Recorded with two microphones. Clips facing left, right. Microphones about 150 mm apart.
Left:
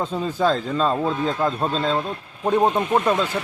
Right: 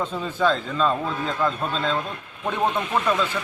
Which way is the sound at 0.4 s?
35° left (ahead or behind).